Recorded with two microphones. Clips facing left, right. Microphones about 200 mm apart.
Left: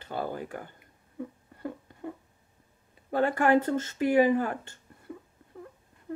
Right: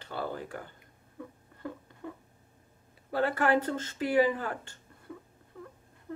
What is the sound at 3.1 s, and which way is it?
Speech, 15° left (ahead or behind).